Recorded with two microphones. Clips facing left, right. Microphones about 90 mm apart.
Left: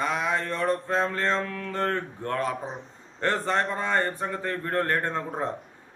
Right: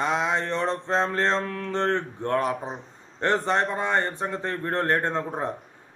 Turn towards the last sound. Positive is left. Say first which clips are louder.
# right 2 dB
turn(degrees=-20)  # may be behind; listen again after turning